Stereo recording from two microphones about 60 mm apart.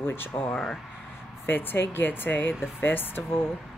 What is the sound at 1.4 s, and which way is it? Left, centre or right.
Speech, left.